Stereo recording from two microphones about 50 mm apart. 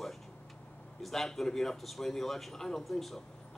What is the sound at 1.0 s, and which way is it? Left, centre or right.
A man's voice, centre.